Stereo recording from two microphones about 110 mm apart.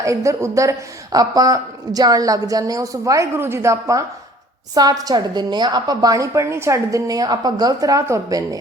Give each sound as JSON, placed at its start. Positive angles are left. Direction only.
{"t": 0.0, "sound": "a woman's voice", "side_deg": -30}